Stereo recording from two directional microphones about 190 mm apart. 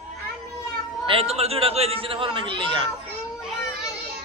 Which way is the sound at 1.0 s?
30° right (ahead or behind).